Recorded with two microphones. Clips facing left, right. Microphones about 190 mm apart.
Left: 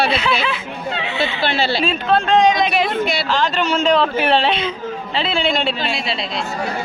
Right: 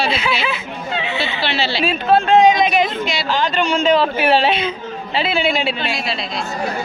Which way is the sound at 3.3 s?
Centre (ahead or behind).